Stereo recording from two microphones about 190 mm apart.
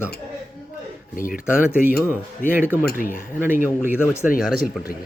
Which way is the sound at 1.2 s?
50° left (ahead or behind).